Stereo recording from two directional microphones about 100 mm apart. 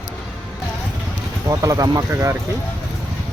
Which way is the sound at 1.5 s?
35° right (ahead or behind).